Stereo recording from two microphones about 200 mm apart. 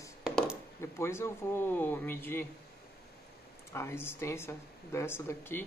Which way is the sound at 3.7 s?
10° left (ahead or behind).